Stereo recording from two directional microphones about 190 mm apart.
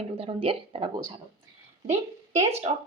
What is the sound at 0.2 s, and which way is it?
Speech, 30° right (ahead or behind).